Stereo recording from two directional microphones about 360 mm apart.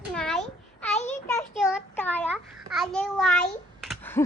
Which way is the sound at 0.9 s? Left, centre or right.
Centre.